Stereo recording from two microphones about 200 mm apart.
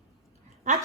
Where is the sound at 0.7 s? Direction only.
35° right (ahead or behind).